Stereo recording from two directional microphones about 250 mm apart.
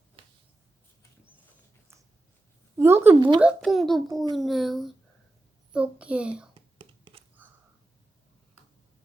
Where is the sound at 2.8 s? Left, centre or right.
Centre.